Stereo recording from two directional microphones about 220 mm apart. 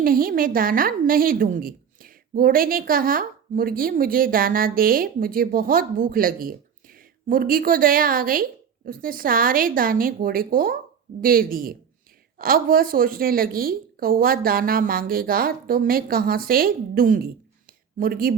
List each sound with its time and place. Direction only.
0.0 s a woman's voice: 40° right (ahead or behind)